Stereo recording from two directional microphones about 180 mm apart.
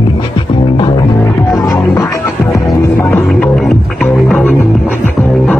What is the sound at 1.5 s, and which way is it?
Music, 20° left (ahead or behind).